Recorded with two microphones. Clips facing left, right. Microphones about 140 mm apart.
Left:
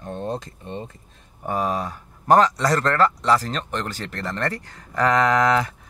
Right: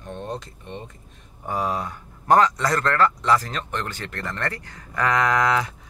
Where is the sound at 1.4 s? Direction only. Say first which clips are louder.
Left 2 dB; 50° left (ahead or behind).